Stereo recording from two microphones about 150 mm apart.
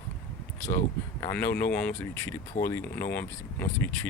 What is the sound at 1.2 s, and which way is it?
Speech, 10° left (ahead or behind).